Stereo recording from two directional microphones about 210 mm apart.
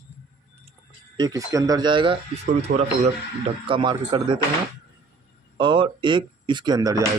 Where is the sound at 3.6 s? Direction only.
25° right (ahead or behind).